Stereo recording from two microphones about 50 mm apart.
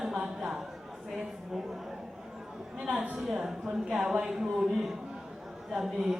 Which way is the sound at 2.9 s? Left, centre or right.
Right.